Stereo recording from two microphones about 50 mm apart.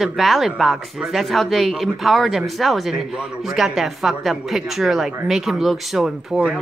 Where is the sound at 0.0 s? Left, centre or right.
Centre.